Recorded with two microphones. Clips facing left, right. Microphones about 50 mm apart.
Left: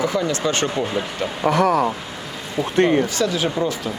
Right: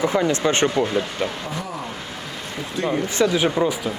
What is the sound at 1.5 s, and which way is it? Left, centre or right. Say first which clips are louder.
Speech: left 13 dB; left.